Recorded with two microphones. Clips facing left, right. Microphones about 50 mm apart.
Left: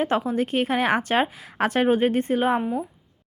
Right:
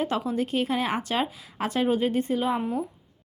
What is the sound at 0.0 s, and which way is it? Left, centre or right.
Speech, left.